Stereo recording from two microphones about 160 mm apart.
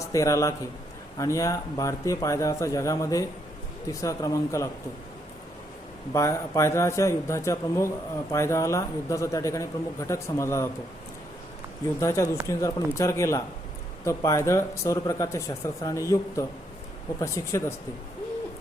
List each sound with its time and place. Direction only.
0.0 s speech: 20° left (ahead or behind)
6.1 s a man's voice: 20° left (ahead or behind)
11.9 s a man's voice: 15° left (ahead or behind)